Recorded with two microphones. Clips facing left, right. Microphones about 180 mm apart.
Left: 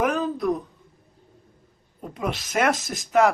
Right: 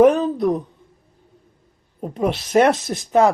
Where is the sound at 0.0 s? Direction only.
30° right (ahead or behind).